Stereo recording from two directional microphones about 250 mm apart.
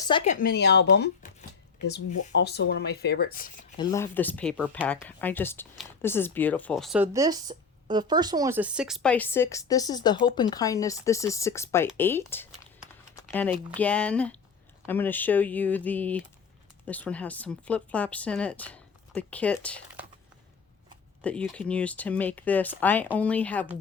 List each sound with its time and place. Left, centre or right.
0.3 s speech: left
2.3 s speech: left
3.8 s speech: centre
13.1 s a sound: centre
13.7 s speech: centre
21.2 s speech: centre